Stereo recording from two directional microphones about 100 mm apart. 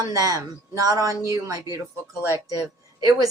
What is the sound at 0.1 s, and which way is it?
Speech, 35° right (ahead or behind).